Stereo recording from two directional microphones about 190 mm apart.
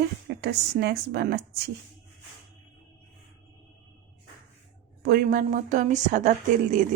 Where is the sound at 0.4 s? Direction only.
60° right (ahead or behind).